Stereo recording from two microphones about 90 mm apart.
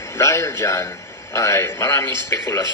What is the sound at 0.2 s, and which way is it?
A man's voice, 30° left (ahead or behind).